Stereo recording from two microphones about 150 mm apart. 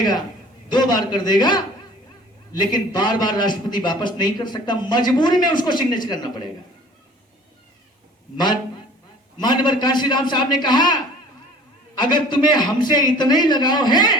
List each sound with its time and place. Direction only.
0.7 s a man's voice: 30° left (ahead or behind)
9.4 s a man's voice: 30° left (ahead or behind)